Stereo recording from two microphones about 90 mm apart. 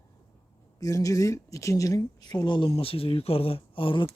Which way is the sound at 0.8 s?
35° left (ahead or behind).